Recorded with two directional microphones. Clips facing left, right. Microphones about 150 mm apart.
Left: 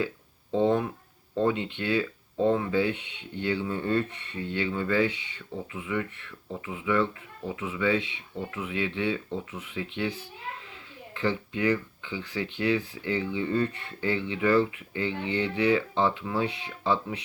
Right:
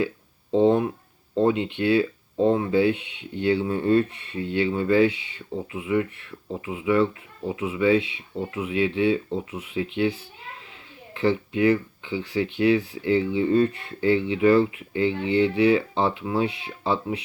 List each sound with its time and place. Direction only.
0.5 s speech: 15° right (ahead or behind)